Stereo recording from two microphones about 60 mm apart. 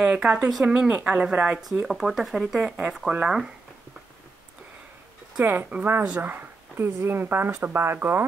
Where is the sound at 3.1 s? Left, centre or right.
Right.